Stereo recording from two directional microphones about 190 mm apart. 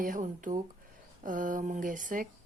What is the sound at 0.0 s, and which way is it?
Speech, 45° right (ahead or behind).